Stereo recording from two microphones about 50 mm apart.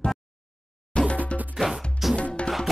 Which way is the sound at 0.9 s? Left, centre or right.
Left.